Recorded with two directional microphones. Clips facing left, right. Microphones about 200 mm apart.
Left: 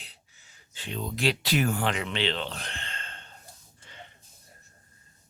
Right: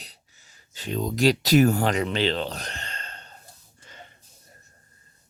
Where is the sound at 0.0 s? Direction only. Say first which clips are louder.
Right 4 dB; 40° right (ahead or behind).